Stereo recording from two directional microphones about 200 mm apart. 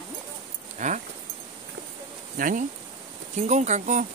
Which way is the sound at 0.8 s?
40° right (ahead or behind).